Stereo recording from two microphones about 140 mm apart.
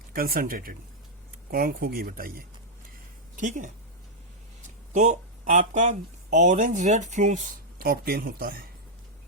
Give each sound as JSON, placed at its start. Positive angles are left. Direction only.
{"t": 0.1, "sound": "speech", "side_deg": -90}
{"t": 3.3, "sound": "speech", "side_deg": -65}
{"t": 4.9, "sound": "speech", "side_deg": -60}